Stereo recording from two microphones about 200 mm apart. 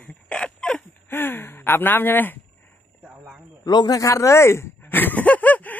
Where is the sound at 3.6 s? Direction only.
20° left (ahead or behind).